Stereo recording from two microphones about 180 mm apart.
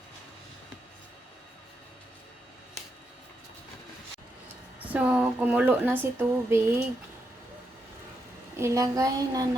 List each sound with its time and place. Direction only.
4.9 s speech: 10° right (ahead or behind)
8.5 s speech: 15° right (ahead or behind)